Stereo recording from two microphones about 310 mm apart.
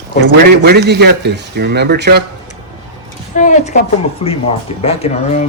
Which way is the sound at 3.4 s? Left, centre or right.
Left.